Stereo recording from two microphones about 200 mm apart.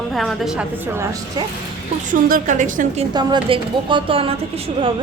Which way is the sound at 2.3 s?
40° right (ahead or behind).